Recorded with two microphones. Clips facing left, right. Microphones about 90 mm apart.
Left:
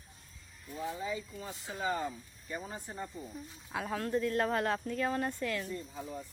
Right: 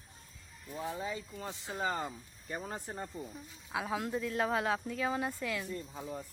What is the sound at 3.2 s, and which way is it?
Speech, 15° left (ahead or behind).